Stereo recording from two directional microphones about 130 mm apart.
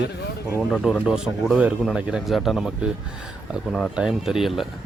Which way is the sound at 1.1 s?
5° right (ahead or behind).